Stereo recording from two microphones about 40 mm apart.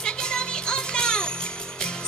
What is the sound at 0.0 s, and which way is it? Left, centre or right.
Music, left.